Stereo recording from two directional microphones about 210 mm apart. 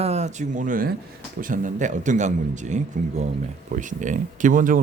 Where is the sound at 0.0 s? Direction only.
30° right (ahead or behind).